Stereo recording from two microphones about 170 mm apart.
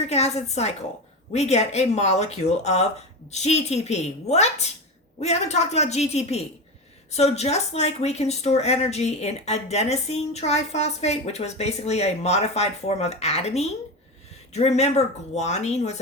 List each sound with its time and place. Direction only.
0.1 s speech: 40° left (ahead or behind)